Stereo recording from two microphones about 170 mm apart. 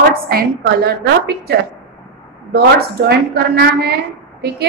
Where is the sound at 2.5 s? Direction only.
70° right (ahead or behind).